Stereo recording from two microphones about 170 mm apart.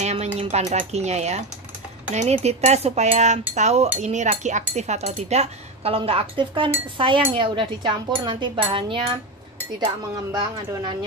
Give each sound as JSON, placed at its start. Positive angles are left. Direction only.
{"t": 0.0, "sound": "a sound", "side_deg": -40}
{"t": 0.4, "sound": "speech", "side_deg": -40}
{"t": 10.7, "sound": "speech", "side_deg": -25}